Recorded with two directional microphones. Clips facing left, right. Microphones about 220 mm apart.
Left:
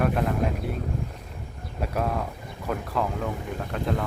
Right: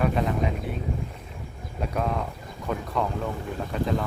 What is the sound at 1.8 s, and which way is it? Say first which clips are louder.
Speech: even; 5° left (ahead or behind).